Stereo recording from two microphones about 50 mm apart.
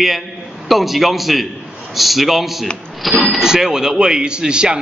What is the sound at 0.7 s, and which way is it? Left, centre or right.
A man's voice, centre.